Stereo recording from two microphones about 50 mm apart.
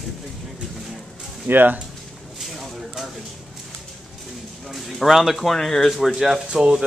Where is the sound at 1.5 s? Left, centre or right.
Right.